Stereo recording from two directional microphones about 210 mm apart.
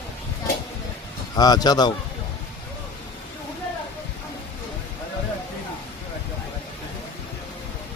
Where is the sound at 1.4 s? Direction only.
20° left (ahead or behind).